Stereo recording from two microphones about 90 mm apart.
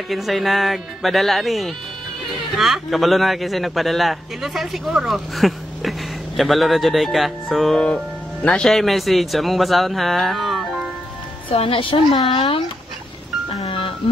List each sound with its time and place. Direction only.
0.1 s speech: centre (ahead or behind)
8.6 s speech: centre (ahead or behind)
11.6 s a woman's voice: 90° left
13.7 s music: 85° left